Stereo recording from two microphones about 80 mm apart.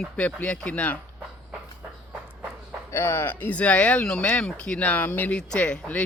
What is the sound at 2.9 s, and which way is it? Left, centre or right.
Speech, left.